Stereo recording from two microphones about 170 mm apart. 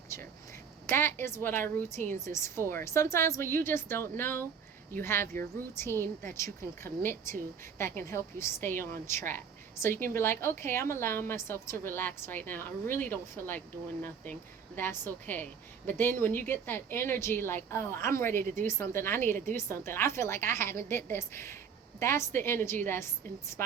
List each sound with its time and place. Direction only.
0.1 s a sound: 15° left (ahead or behind)
0.9 s a woman's voice: 15° left (ahead or behind)
14.8 s a woman's voice: 10° left (ahead or behind)